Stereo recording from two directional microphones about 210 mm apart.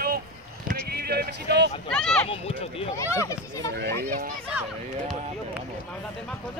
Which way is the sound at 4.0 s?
45° right (ahead or behind).